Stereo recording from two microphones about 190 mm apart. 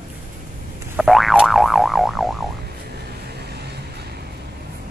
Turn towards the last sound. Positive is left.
turn(degrees=-60)  # may be behind; listen again after turning